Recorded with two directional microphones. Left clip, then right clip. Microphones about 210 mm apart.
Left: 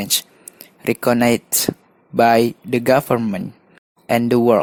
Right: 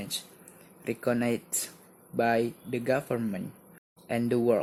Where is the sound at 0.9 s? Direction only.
50° left (ahead or behind).